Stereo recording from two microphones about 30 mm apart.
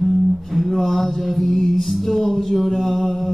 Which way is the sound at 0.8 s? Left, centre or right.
Centre.